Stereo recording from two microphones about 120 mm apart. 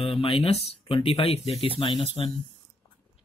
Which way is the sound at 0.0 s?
55° left (ahead or behind).